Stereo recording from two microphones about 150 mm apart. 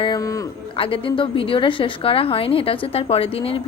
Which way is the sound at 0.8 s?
35° left (ahead or behind).